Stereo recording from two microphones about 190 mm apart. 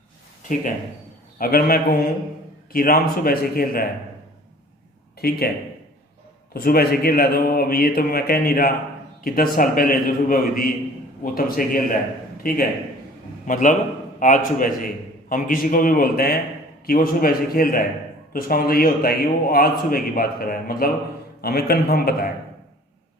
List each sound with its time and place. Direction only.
1.4 s a man's voice: 50° left (ahead or behind)
5.2 s a man's voice: 55° left (ahead or behind)
6.5 s a man's voice: 55° left (ahead or behind)